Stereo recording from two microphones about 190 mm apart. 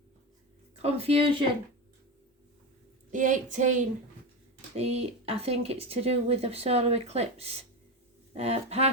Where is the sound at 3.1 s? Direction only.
40° right (ahead or behind).